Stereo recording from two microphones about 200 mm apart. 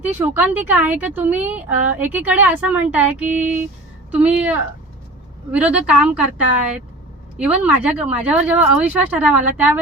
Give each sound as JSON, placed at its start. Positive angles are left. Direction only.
{"t": 0.0, "sound": "a woman's voice", "side_deg": -10}
{"t": 3.2, "sound": "female singing", "side_deg": -40}
{"t": 4.1, "sound": "a woman's voice", "side_deg": -5}